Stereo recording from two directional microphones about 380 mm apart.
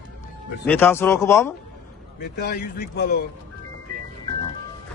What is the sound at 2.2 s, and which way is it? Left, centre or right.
Speech, left.